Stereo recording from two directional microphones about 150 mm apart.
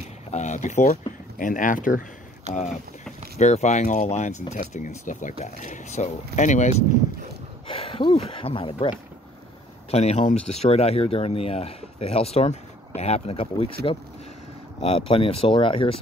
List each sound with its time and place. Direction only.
0.3 s speech: 50° left (ahead or behind)
3.3 s speech: 50° left (ahead or behind)
7.6 s speech: 40° left (ahead or behind)
14.8 s speech: 40° left (ahead or behind)